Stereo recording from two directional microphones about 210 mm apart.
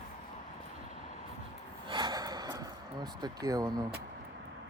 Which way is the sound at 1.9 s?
20° right (ahead or behind).